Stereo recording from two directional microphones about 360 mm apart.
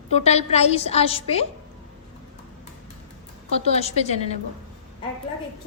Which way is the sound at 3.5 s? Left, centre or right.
Centre.